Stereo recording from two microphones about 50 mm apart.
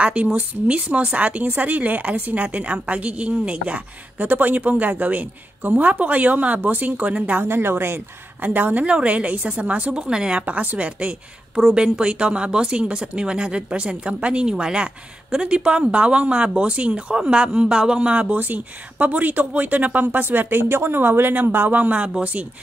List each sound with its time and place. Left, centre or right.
0.0 s a woman's voice: right
7.4 s speech: right
8.8 s a woman's voice: right
10.4 s a woman's voice: right
18.4 s a woman's voice: right